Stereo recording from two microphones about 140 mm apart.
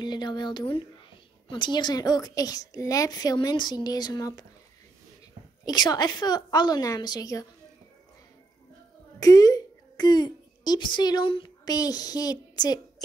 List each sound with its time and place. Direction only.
0.0 s a woman's voice: 30° left (ahead or behind)
5.7 s a woman's voice: 30° left (ahead or behind)
9.2 s a woman's voice: 25° left (ahead or behind)